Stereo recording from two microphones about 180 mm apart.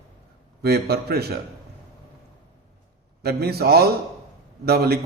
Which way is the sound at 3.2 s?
60° right (ahead or behind).